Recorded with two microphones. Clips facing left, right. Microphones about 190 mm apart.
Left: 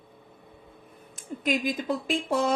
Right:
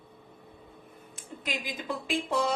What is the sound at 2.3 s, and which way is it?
Music, 50° left (ahead or behind).